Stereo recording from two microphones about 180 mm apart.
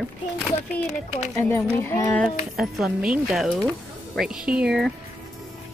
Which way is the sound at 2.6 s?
Centre (ahead or behind).